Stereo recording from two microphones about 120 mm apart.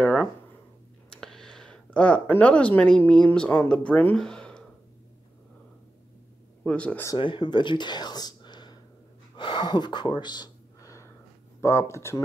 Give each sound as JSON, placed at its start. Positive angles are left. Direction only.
{"t": 0.0, "sound": "a sound", "side_deg": 10}
{"t": 1.1, "sound": "speech", "side_deg": 5}
{"t": 6.6, "sound": "speech", "side_deg": 10}
{"t": 7.2, "sound": "speech", "side_deg": 40}
{"t": 9.4, "sound": "a sound", "side_deg": 40}
{"t": 11.6, "sound": "speech", "side_deg": 25}